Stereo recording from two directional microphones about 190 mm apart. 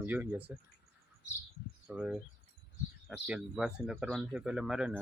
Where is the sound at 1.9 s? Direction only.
5° right (ahead or behind).